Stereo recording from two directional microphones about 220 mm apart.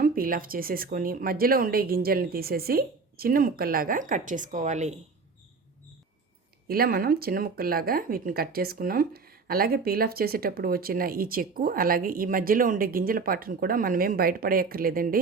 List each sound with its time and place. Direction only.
0.0 s speech: 40° right (ahead or behind)
6.7 s speech: 40° right (ahead or behind)